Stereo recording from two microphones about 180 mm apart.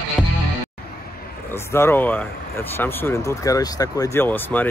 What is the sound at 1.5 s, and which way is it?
Speech, 15° left (ahead or behind).